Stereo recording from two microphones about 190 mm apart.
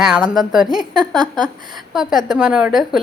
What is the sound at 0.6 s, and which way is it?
Speech, 20° right (ahead or behind).